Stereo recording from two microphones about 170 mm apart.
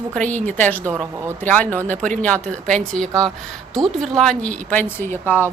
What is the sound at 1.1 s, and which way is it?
Speech, 15° right (ahead or behind).